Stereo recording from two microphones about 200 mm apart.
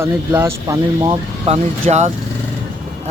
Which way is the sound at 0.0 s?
15° right (ahead or behind).